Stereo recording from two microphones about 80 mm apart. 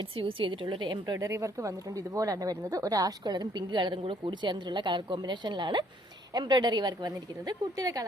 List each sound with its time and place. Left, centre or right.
0.3 s a woman's voice: right
1.1 s a woman's voice: right
6.3 s a woman's voice: right